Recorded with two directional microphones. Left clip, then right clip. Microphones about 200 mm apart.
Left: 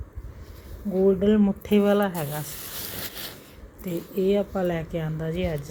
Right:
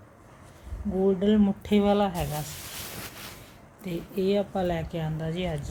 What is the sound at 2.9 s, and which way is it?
Sanding, 35° left (ahead or behind).